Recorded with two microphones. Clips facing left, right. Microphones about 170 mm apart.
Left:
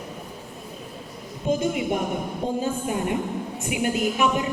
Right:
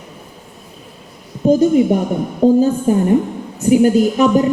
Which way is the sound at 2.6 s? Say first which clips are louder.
Right 12 dB; 40° right (ahead or behind).